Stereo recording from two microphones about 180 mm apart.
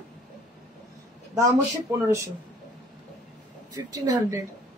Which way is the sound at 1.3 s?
15° right (ahead or behind).